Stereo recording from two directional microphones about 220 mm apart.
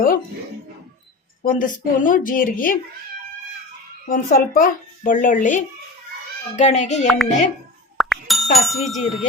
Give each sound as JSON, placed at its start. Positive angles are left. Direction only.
{"t": 1.5, "sound": "a woman's voice", "side_deg": 40}
{"t": 4.1, "sound": "a woman's voice", "side_deg": 35}
{"t": 7.9, "sound": "music", "side_deg": 0}
{"t": 8.5, "sound": "speech", "side_deg": 0}